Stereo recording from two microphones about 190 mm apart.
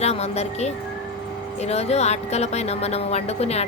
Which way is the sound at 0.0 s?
35° left (ahead or behind).